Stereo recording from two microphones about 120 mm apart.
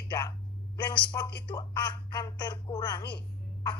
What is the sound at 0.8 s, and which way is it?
Speech, 35° left (ahead or behind).